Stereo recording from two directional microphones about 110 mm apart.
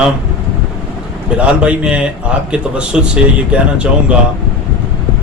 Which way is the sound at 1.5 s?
10° right (ahead or behind).